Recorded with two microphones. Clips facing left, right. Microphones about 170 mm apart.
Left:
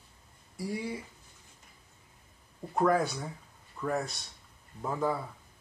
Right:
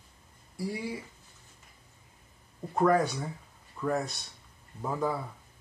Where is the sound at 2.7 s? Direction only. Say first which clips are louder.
Right 2 dB; centre (ahead or behind).